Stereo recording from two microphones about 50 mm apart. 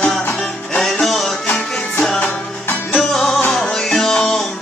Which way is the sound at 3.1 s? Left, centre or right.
Centre.